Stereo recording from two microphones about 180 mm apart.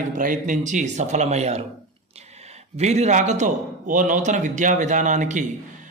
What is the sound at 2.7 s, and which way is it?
A man's voice, 40° right (ahead or behind).